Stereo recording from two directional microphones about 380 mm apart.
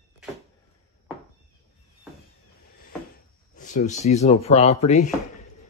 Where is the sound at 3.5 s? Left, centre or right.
Centre.